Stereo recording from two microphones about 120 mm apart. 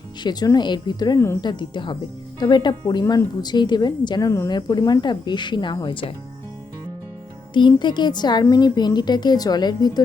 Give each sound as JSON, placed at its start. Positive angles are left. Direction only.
{"t": 0.2, "sound": "a woman's voice", "side_deg": 35}
{"t": 7.5, "sound": "a woman's voice", "side_deg": 40}